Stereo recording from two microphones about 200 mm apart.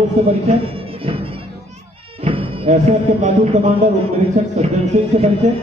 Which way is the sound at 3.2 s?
35° right (ahead or behind).